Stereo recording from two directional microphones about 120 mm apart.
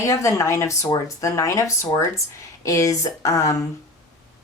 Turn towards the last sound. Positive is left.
turn(degrees=25)  # may be behind; listen again after turning